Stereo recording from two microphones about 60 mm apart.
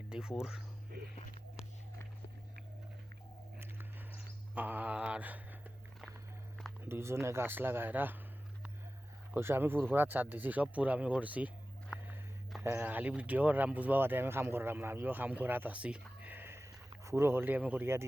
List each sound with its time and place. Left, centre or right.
0.1 s speech: centre
4.1 s a sound: right
5.0 s speech: right
6.8 s speech: right
9.3 s speech: right
12.6 s speech: right
15.7 s a sound: right
16.3 s a sound: right
17.1 s speech: right
17.4 s speech: right